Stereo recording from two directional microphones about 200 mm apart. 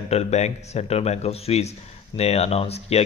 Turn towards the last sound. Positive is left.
turn(degrees=30)  # may be behind; listen again after turning